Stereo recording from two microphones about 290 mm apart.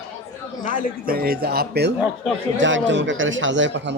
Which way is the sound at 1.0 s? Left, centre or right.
Right.